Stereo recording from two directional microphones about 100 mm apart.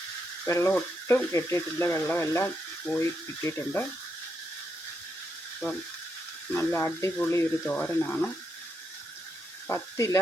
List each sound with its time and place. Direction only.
0.4 s speech: 25° left (ahead or behind)
5.6 s speech: 25° left (ahead or behind)
9.6 s speech: 30° left (ahead or behind)